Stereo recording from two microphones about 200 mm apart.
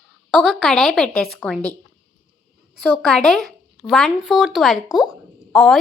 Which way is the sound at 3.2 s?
Centre (ahead or behind).